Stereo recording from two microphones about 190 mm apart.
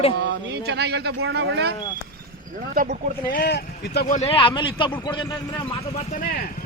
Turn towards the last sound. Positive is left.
turn(degrees=25)  # may be behind; listen again after turning